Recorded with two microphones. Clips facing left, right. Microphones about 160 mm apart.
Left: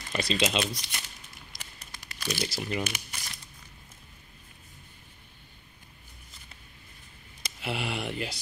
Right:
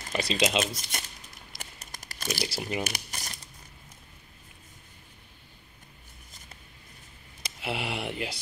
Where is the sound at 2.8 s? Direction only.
40° right (ahead or behind).